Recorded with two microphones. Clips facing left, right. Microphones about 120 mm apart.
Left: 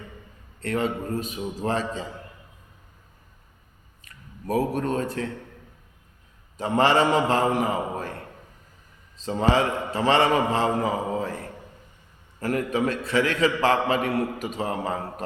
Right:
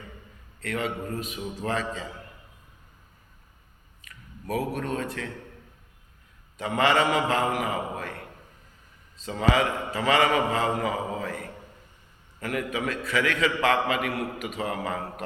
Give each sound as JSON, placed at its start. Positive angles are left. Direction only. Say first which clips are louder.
{"t": 0.6, "sound": "a man's voice", "louder": "left 4 dB", "side_deg": 35}
{"t": 4.0, "sound": "speech", "louder": "left 4 dB", "side_deg": 35}
{"t": 6.6, "sound": "a man's voice", "louder": "left 3 dB", "side_deg": 35}
{"t": 9.2, "sound": "a man's voice", "louder": "left 2 dB", "side_deg": 30}